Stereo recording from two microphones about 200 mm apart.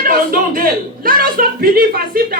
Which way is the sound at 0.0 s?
45° right (ahead or behind).